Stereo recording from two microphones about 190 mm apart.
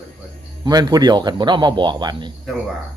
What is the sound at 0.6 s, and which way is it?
Speech, 20° right (ahead or behind).